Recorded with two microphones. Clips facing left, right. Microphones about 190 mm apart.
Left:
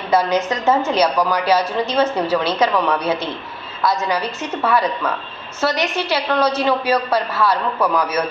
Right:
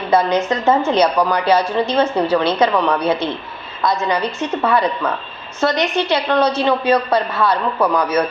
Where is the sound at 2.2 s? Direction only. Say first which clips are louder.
Right 2 dB; 5° left (ahead or behind).